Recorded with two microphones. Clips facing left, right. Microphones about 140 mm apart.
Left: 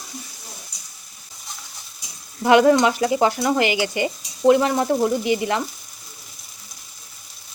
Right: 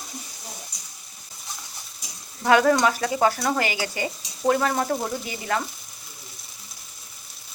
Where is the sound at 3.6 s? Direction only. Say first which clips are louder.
Left 6 dB; 40° right (ahead or behind).